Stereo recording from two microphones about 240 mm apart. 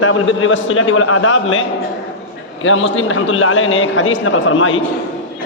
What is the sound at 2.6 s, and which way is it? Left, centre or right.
A man's voice, left.